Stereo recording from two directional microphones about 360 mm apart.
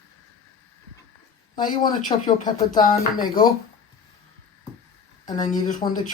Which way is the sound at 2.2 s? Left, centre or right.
Centre.